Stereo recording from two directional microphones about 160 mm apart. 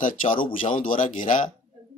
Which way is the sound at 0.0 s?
55° left (ahead or behind).